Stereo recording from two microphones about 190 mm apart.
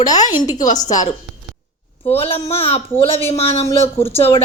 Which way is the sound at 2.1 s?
30° left (ahead or behind).